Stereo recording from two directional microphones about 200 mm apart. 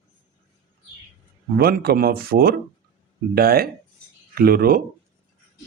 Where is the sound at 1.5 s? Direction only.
50° right (ahead or behind).